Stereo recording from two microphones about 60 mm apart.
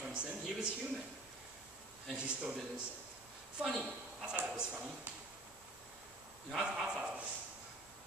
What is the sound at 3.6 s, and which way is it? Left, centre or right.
Speech, centre.